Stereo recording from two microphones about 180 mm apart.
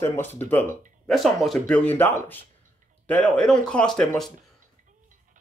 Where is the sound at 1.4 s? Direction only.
5° left (ahead or behind).